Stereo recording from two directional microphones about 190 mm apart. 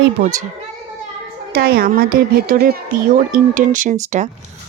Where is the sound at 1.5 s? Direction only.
50° right (ahead or behind).